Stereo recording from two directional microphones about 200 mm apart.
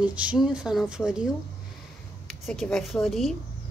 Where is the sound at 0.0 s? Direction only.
5° right (ahead or behind).